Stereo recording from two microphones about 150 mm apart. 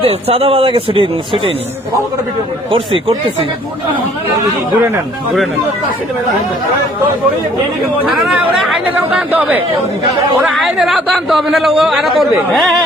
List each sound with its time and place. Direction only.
0.0 s speech: 40° right (ahead or behind)
2.7 s speech: 35° right (ahead or behind)
8.0 s speech: 10° right (ahead or behind)
10.6 s a man's voice: 5° right (ahead or behind)